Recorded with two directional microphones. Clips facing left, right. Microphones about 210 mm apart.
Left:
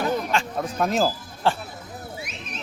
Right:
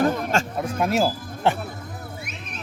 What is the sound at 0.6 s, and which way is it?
Speech, 10° right (ahead or behind).